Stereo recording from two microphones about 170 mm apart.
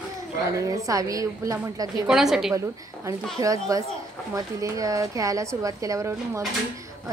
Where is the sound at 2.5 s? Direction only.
20° right (ahead or behind).